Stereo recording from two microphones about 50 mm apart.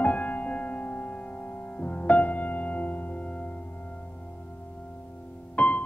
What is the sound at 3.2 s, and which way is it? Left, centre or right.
Music, left.